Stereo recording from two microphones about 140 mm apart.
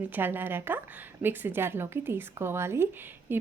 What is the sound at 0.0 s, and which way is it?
A woman's voice, 15° right (ahead or behind).